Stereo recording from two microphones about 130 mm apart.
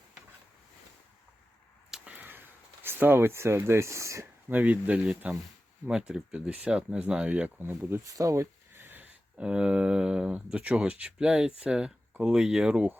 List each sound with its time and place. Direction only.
1.9 s speech: 10° right (ahead or behind)